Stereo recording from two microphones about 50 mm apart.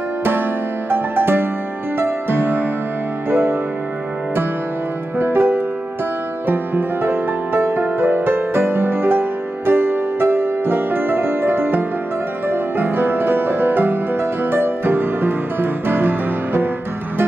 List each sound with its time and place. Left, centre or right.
0.2 s music: right
5.2 s music: right